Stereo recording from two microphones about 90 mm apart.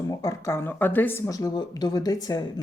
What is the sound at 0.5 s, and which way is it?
Speech, 25° left (ahead or behind).